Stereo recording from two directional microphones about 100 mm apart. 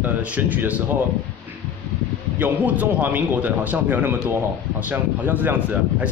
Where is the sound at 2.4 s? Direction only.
15° right (ahead or behind).